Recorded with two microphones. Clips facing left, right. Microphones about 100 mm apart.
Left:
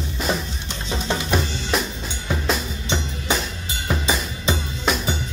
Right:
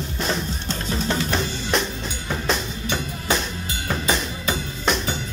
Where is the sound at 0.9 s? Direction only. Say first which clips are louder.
Even; 20° left (ahead or behind).